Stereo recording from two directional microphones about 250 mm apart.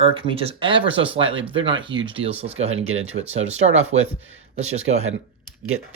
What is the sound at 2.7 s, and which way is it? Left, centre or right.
Speech, right.